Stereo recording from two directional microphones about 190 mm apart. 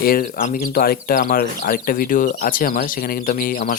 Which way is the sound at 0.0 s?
50° left (ahead or behind).